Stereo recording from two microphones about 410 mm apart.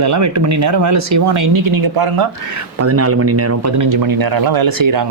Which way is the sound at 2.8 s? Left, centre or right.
Right.